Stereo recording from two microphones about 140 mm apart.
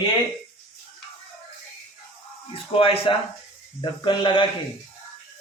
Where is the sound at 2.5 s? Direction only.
40° left (ahead or behind).